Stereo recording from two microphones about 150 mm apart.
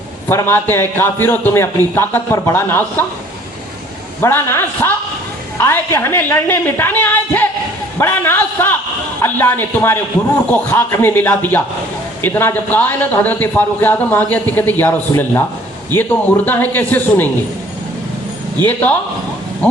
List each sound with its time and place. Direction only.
0.3 s a man's voice: 15° left (ahead or behind)
4.2 s a man's voice: 15° left (ahead or behind)
18.6 s a man's voice: 10° left (ahead or behind)